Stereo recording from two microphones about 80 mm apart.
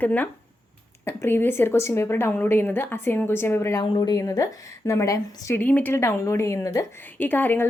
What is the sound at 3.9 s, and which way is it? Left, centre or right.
Speech, left.